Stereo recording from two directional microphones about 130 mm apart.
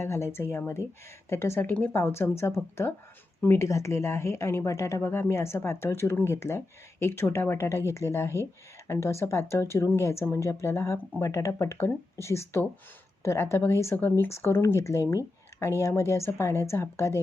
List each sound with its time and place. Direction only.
0.0 s a woman's voice: 20° left (ahead or behind)